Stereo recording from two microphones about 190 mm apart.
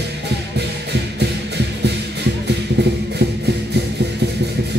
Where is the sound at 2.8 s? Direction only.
60° right (ahead or behind).